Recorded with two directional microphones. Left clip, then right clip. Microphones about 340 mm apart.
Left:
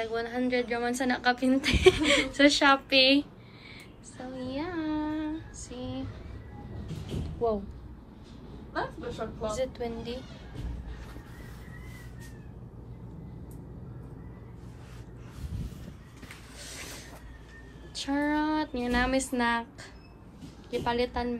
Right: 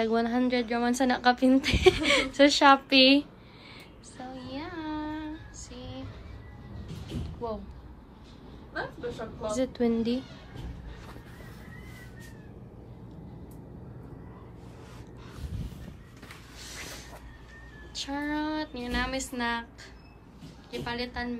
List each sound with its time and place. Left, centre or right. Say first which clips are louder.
0.0 s a woman's voice: right 4 dB; centre
4.4 s a sound: left 5 dB; centre
7.4 s speech: left 7 dB; centre
9.5 s a woman's voice: right 6 dB; centre
16.6 s a sound: right 1 dB; centre
17.9 s speech: left 3 dB; centre